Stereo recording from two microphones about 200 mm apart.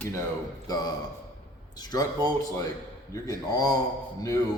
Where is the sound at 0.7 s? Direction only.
20° left (ahead or behind).